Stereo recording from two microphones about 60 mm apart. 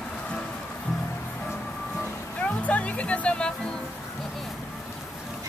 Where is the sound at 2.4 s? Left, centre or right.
Left.